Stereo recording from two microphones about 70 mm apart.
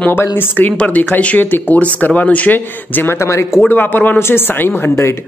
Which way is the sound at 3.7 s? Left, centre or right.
Left.